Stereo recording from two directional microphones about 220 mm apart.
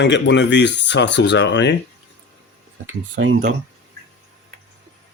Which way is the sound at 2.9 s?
60° right (ahead or behind).